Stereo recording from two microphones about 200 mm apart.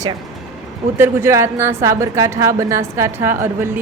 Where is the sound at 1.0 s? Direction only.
10° right (ahead or behind).